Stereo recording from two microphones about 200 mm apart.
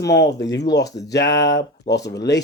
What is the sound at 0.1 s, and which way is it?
Speech, 60° left (ahead or behind).